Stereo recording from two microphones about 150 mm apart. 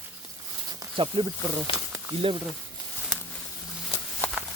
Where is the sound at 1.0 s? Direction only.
35° right (ahead or behind).